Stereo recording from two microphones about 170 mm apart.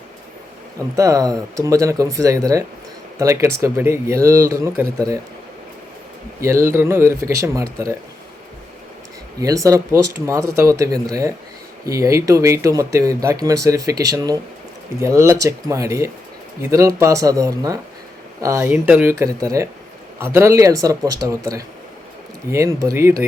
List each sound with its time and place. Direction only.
0.9 s speech: 20° right (ahead or behind)
6.4 s speech: 15° right (ahead or behind)
9.4 s speech: 20° right (ahead or behind)